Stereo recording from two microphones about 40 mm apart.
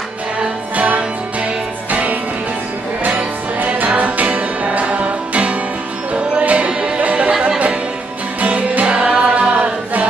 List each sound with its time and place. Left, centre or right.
0.7 s music: right
8.8 s music: right